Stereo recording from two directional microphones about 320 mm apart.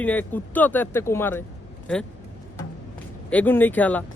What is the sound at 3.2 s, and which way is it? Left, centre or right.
Speech, centre.